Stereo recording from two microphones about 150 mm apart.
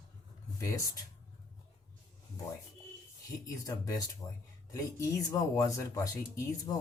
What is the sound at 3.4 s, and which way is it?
Speech, 20° left (ahead or behind).